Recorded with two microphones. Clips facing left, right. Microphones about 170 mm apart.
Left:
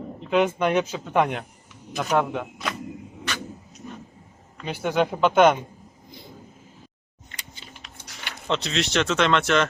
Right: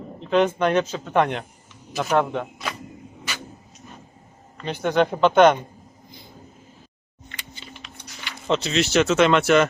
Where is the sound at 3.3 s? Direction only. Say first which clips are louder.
Left 3 dB; 10° right (ahead or behind).